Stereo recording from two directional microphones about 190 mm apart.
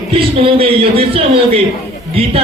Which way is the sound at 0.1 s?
30° right (ahead or behind).